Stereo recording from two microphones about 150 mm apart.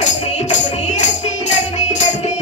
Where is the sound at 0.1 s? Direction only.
50° left (ahead or behind).